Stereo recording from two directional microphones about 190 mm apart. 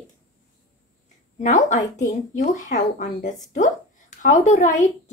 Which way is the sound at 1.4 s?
40° left (ahead or behind).